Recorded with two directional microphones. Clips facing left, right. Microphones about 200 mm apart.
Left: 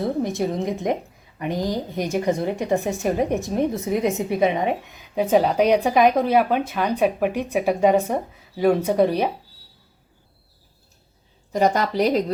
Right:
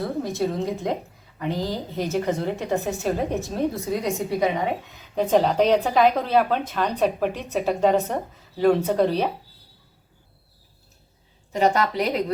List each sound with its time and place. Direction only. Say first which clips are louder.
0.0 s a woman's voice: left 2 dB; 20° left (ahead or behind)
5.1 s speech: left 1 dB; 10° left (ahead or behind)
11.6 s a woman's voice: left 1 dB; 35° left (ahead or behind)